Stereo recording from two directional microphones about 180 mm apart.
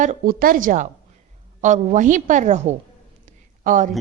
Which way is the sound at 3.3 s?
45° right (ahead or behind).